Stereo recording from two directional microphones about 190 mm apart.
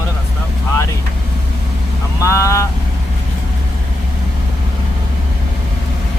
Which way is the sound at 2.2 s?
15° left (ahead or behind).